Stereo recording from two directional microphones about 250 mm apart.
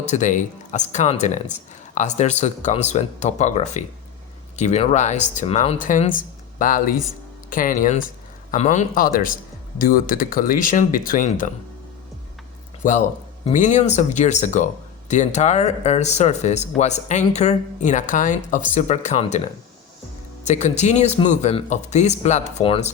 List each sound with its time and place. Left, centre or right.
0.0 s speech: left
12.8 s speech: left
20.4 s speech: left